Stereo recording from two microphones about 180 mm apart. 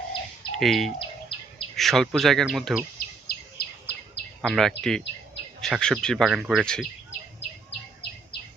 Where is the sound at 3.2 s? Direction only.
65° left (ahead or behind).